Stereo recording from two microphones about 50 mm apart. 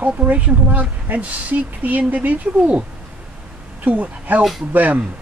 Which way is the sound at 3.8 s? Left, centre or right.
Right.